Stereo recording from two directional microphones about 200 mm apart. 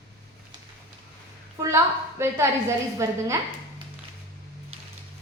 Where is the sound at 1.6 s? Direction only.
15° right (ahead or behind).